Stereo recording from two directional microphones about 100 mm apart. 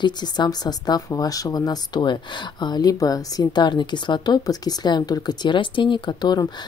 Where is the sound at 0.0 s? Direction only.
45° left (ahead or behind).